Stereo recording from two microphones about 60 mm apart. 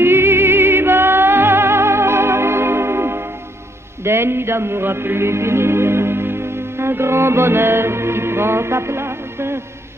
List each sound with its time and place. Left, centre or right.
0.0 s music: right